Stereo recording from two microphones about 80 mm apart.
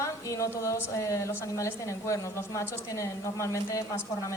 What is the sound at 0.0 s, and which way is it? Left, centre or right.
A woman's voice, left.